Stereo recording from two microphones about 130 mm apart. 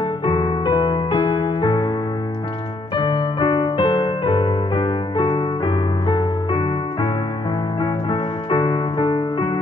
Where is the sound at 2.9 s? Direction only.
35° left (ahead or behind).